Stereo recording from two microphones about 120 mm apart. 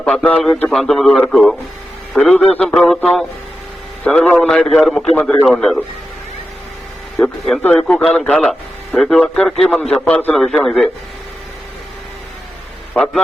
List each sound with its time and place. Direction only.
0.0 s a man's voice: 10° left (ahead or behind)
7.2 s a man's voice: 5° left (ahead or behind)
10.3 s a man's voice: centre (ahead or behind)
12.9 s a man's voice: 10° left (ahead or behind)